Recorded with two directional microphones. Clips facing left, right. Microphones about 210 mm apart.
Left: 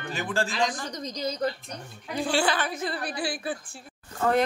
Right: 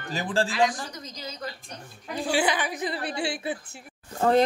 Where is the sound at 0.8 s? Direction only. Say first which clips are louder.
Left 7 dB; 40° left (ahead or behind).